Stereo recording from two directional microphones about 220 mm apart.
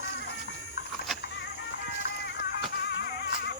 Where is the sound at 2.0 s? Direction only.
45° left (ahead or behind).